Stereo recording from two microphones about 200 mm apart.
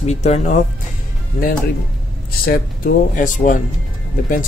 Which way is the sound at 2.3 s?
45° left (ahead or behind).